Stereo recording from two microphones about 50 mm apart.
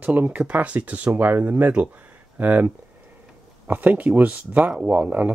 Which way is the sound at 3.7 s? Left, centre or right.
Right.